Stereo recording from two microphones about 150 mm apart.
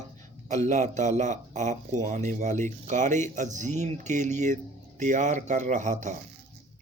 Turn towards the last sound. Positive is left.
turn(degrees=-55)  # may be behind; listen again after turning